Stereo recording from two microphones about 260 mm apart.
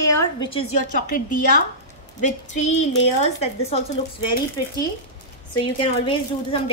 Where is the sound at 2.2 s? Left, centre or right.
Left.